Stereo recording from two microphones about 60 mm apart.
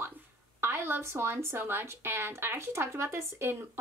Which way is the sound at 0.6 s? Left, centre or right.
Right.